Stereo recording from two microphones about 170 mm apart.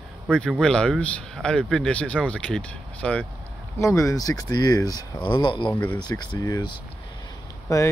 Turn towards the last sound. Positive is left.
turn(degrees=20)  # may be behind; listen again after turning